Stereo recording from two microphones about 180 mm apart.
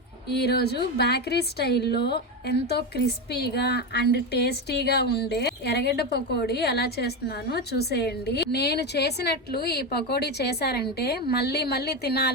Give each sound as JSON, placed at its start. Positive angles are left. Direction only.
{"t": 0.3, "sound": "a woman's voice", "side_deg": 65}